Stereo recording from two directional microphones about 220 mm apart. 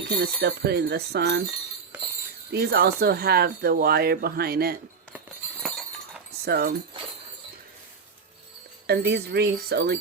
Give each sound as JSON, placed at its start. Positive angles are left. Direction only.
{"t": 0.2, "sound": "speech", "side_deg": -45}
{"t": 2.5, "sound": "speech", "side_deg": -45}
{"t": 5.1, "sound": "glass", "side_deg": 0}
{"t": 6.4, "sound": "speech", "side_deg": -45}
{"t": 8.9, "sound": "speech", "side_deg": -50}